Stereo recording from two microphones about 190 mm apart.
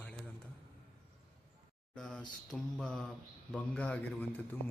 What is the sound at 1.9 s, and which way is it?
Speech, 5° left (ahead or behind).